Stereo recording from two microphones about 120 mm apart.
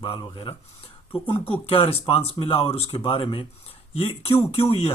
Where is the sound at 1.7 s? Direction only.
55° left (ahead or behind).